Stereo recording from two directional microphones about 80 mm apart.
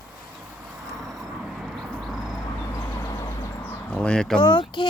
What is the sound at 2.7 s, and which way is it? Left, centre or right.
Vehicle, left.